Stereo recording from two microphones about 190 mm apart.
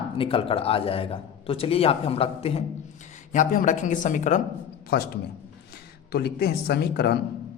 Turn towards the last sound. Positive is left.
turn(degrees=55)  # may be behind; listen again after turning